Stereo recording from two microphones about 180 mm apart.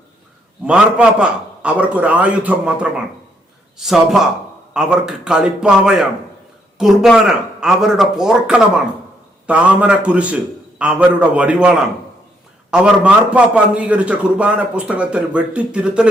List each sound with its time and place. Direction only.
0.6 s a man's voice: 5° right (ahead or behind)